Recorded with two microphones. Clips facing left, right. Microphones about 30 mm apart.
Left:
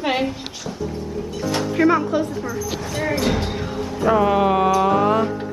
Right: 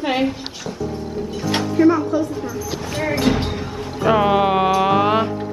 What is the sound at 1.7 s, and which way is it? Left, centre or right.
Speech, left.